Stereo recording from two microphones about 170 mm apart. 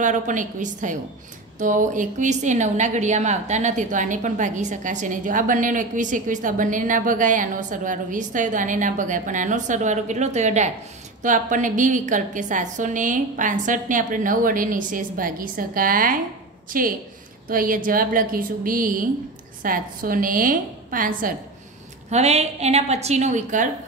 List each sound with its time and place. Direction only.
0.0 s a woman's voice: 50° right (ahead or behind)
22.1 s a woman's voice: 40° right (ahead or behind)